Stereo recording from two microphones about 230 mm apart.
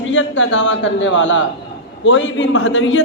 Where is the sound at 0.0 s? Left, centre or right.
Left.